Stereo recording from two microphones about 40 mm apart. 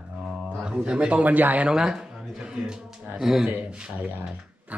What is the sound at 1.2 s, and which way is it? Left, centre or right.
Speech, right.